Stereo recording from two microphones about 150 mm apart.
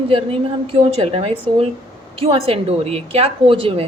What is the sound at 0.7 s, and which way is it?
Speech, 40° right (ahead or behind).